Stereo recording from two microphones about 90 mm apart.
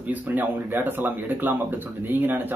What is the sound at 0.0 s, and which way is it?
Speech, 20° right (ahead or behind).